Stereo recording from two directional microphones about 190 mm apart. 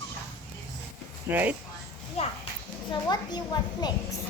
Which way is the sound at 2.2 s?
35° left (ahead or behind).